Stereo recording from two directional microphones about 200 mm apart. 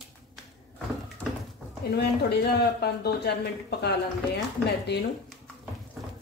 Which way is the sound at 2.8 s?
55° left (ahead or behind).